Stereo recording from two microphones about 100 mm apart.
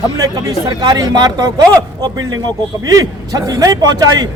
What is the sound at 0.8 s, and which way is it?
A man's voice, 40° right (ahead or behind).